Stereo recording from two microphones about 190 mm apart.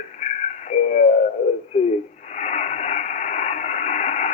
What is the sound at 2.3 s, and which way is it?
Radio, 35° left (ahead or behind).